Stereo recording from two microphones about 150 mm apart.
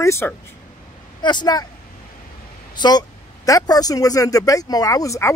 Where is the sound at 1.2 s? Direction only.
30° left (ahead or behind).